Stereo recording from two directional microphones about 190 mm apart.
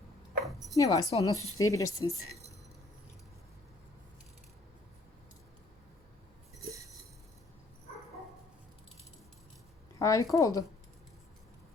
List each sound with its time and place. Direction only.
0.4 s a sound: centre (ahead or behind)
0.8 s a woman's voice: 20° left (ahead or behind)
10.0 s speech: 15° left (ahead or behind)